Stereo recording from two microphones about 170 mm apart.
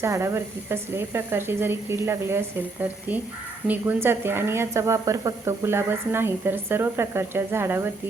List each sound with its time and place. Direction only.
0.0 s speech: 15° right (ahead or behind)
3.7 s speech: 10° right (ahead or behind)